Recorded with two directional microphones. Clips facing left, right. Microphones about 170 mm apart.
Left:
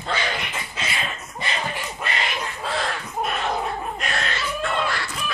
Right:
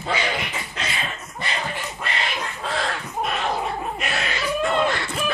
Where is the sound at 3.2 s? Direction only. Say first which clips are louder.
Even; centre (ahead or behind).